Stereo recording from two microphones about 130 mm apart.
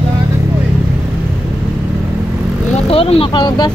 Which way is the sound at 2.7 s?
50° left (ahead or behind).